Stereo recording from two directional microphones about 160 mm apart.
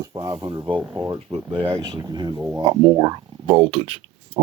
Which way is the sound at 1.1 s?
30° right (ahead or behind).